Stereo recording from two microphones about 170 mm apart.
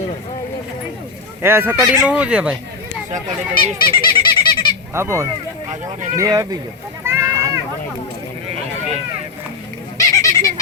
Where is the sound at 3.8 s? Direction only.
60° left (ahead or behind).